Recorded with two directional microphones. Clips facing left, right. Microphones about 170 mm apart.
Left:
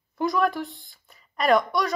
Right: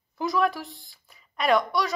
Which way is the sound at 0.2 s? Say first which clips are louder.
Left 1 dB; centre (ahead or behind).